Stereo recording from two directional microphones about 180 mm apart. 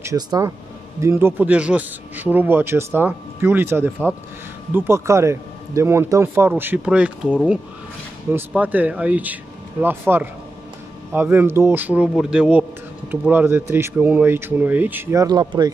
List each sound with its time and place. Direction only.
0.0 s speech: 15° right (ahead or behind)